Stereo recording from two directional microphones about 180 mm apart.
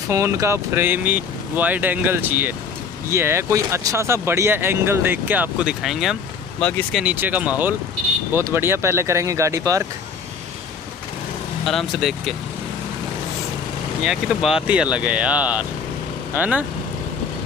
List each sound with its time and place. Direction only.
0.1 s speech: 15° right (ahead or behind); by 7.0 s 5° left (ahead or behind)
7.0 s speech: 10° right (ahead or behind)
11.6 s speech: centre (ahead or behind)
14.0 s speech: 5° right (ahead or behind)